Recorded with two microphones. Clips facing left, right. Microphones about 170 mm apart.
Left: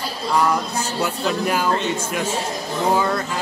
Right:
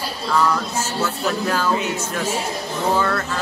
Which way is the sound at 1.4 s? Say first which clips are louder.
Left 1 dB; 15° left (ahead or behind).